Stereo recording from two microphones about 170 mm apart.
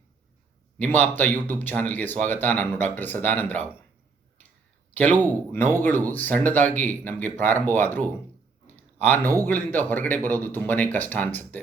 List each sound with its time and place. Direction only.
0.8 s a man's voice: 10° left (ahead or behind)
4.9 s a man's voice: 10° left (ahead or behind)